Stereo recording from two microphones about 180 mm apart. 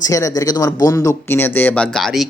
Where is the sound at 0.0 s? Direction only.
20° left (ahead or behind).